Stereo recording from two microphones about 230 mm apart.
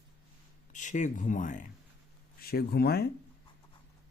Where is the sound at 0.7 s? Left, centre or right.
Left.